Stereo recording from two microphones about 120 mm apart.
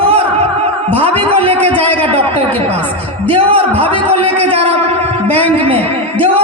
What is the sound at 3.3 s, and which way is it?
Speech, 50° right (ahead or behind).